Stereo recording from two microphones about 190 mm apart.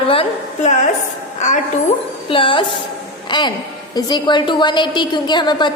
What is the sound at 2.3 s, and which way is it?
A woman's voice, 25° left (ahead or behind).